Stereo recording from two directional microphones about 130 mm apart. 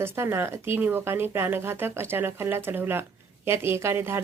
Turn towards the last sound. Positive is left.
turn(degrees=-20)  # may be behind; listen again after turning